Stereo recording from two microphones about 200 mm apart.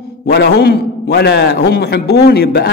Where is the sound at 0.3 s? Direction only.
55° left (ahead or behind).